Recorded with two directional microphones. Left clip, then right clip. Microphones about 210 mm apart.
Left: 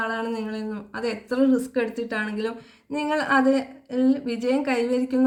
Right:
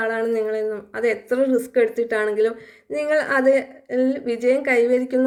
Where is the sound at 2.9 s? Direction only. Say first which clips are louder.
Right 3 dB; 20° right (ahead or behind).